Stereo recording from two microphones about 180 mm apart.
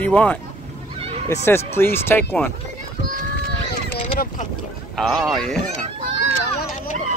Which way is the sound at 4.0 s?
45° left (ahead or behind).